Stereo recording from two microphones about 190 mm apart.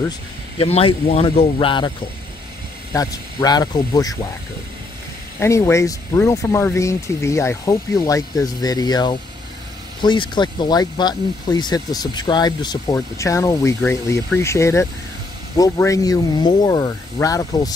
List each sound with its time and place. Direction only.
0.6 s a man's voice: 30° left (ahead or behind)
2.9 s speech: 15° left (ahead or behind)
5.4 s speech: 15° left (ahead or behind)